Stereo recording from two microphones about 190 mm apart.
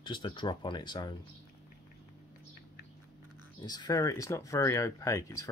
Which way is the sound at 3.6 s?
20° left (ahead or behind).